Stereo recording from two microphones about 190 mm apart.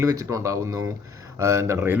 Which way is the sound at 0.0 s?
20° right (ahead or behind).